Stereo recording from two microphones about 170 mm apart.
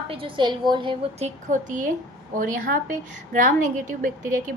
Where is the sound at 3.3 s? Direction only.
45° right (ahead or behind).